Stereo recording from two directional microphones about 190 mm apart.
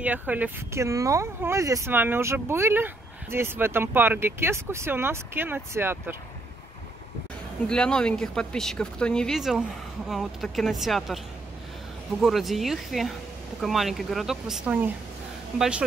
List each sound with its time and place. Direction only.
0.0 s speech: 10° right (ahead or behind)
7.6 s speech: 5° left (ahead or behind)
12.2 s speech: centre (ahead or behind)